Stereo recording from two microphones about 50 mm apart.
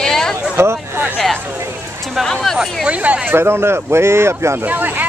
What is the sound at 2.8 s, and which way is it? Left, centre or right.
Speech, right.